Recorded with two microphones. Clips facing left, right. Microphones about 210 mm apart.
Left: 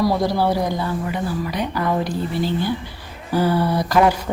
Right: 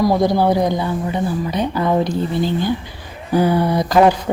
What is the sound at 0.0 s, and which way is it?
Speech, 20° right (ahead or behind).